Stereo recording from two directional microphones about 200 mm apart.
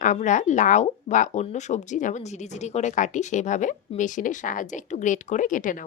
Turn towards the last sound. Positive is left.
turn(degrees=40)  # may be behind; listen again after turning